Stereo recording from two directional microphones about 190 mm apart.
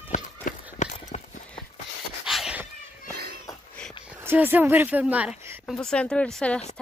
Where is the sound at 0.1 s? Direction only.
40° left (ahead or behind).